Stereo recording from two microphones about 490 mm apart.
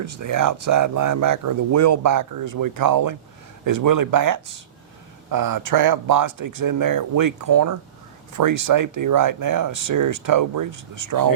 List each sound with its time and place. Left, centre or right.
0.0 s speech: right